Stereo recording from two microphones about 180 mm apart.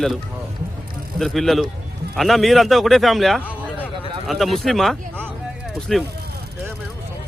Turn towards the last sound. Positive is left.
turn(degrees=0)  # may be behind; listen again after turning